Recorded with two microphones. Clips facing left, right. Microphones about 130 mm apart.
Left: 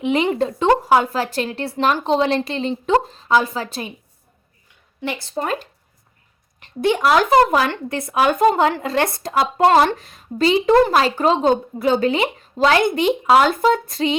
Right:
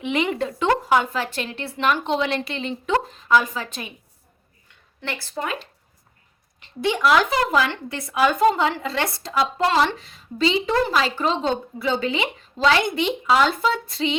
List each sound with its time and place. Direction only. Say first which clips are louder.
0.0 s a woman's voice: left 5 dB; 35° left (ahead or behind)
4.9 s a woman's voice: left 5 dB; 15° left (ahead or behind)
5.4 s a woman's voice: left 5 dB; 40° left (ahead or behind)